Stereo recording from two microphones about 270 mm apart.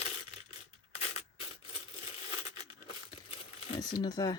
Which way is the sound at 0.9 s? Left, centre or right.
Left.